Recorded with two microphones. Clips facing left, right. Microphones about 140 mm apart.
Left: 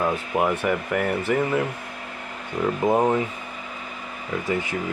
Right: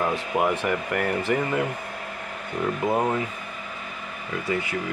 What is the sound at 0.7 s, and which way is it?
Speech, 5° left (ahead or behind).